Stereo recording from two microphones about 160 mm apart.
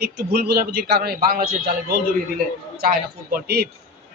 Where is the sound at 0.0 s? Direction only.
70° right (ahead or behind).